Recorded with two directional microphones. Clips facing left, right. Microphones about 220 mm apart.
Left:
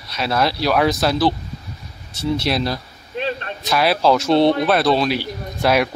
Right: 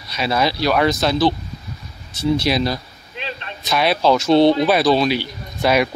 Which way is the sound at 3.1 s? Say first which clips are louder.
Left 7 dB; 50° left (ahead or behind).